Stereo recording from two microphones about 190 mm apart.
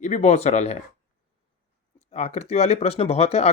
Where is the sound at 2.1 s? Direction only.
35° left (ahead or behind).